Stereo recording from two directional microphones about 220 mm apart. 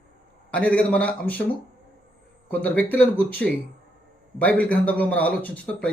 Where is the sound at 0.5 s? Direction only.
5° left (ahead or behind).